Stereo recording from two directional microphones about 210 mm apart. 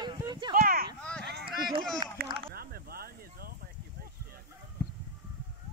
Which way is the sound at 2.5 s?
45° right (ahead or behind).